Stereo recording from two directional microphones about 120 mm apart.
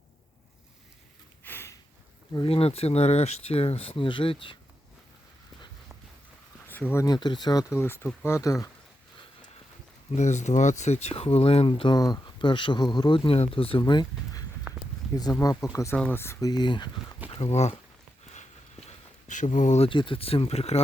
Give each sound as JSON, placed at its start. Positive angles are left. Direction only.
{"t": 1.5, "sound": "a sound", "side_deg": 20}
{"t": 2.3, "sound": "speech", "side_deg": 45}
{"t": 6.7, "sound": "a sound", "side_deg": 15}
{"t": 7.0, "sound": "speech", "side_deg": 35}
{"t": 10.2, "sound": "speech", "side_deg": 75}
{"t": 11.9, "sound": "speech", "side_deg": 35}
{"t": 14.7, "sound": "a sound", "side_deg": -15}
{"t": 15.1, "sound": "speech", "side_deg": 30}
{"t": 16.5, "sound": "speech", "side_deg": 40}
{"t": 17.3, "sound": "speech", "side_deg": 60}
{"t": 18.9, "sound": "a sound", "side_deg": 90}
{"t": 19.9, "sound": "speech", "side_deg": 45}